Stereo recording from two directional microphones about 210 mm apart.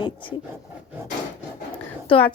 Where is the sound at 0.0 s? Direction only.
25° left (ahead or behind).